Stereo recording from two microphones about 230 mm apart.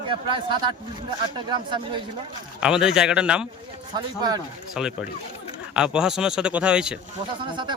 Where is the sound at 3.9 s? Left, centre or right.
Centre.